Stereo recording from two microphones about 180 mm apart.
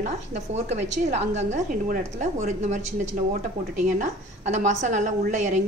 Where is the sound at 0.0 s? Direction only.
40° right (ahead or behind).